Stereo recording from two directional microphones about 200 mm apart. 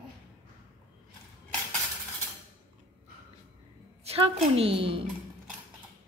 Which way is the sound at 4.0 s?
30° right (ahead or behind).